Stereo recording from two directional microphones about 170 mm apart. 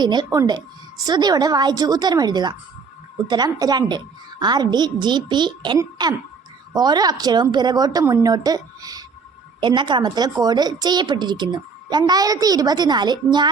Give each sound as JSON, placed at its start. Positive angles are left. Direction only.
{"t": 0.0, "sound": "a child's voice", "side_deg": -25}